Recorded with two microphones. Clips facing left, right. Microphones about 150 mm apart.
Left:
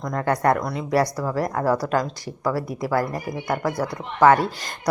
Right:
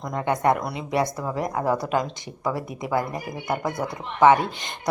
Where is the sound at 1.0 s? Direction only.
20° right (ahead or behind).